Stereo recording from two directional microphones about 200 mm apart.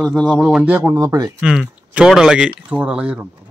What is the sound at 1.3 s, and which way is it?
Speech, 5° right (ahead or behind).